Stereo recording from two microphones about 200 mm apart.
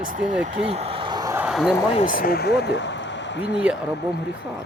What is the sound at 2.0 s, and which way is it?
Speech, 45° left (ahead or behind).